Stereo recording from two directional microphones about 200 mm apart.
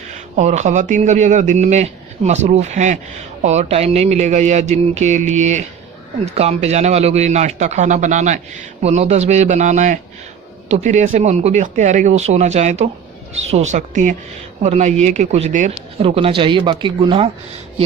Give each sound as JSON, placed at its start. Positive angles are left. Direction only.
{"t": 0.1, "sound": "speech", "side_deg": -35}